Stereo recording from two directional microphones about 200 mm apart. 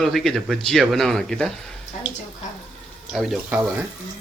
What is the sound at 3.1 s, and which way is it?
Speech, centre (ahead or behind).